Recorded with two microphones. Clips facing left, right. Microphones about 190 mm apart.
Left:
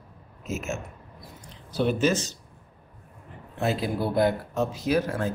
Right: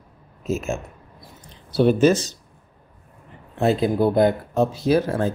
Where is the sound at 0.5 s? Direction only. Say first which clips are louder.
Right 7 dB; 30° right (ahead or behind).